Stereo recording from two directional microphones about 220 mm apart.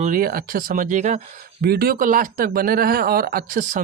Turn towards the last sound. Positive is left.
turn(degrees=-35)  # may be behind; listen again after turning